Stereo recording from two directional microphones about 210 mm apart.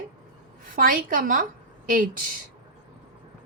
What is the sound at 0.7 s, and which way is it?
A woman's voice, 40° right (ahead or behind).